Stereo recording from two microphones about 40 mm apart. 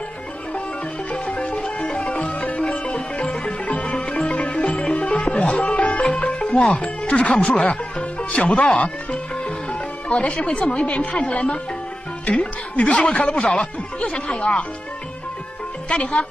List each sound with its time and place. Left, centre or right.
1.2 s music: left
6.6 s speech: left
15.9 s speech: left